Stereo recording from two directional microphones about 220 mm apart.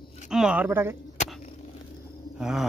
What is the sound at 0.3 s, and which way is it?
Speech, 5° right (ahead or behind).